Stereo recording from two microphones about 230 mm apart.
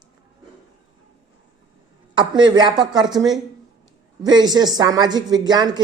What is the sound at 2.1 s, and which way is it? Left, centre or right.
A woman's voice, centre.